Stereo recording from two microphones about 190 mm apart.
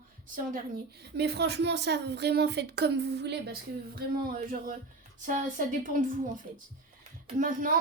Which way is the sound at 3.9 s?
50° right (ahead or behind).